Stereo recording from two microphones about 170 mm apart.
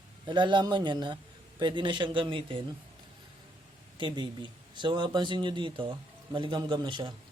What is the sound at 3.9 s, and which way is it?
A man's voice, 30° right (ahead or behind).